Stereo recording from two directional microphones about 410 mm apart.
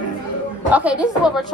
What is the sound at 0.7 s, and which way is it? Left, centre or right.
Speech, centre.